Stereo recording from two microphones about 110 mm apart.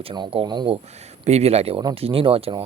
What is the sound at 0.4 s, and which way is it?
Speech, 40° right (ahead or behind).